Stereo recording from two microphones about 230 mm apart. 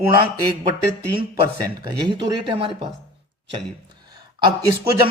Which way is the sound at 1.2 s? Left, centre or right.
Centre.